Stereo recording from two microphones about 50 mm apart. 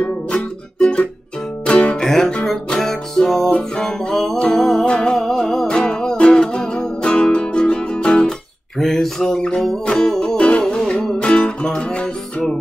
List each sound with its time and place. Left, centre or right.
0.3 s music: left
2.0 s music: centre
3.4 s music: left
4.0 s music: centre
4.8 s music: centre
8.7 s a sound: centre
9.5 s music: centre